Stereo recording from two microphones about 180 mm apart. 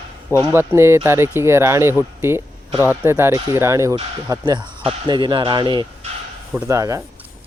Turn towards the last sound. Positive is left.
turn(degrees=-15)  # may be behind; listen again after turning